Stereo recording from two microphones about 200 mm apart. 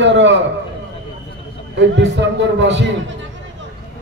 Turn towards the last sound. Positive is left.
turn(degrees=-65)  # may be behind; listen again after turning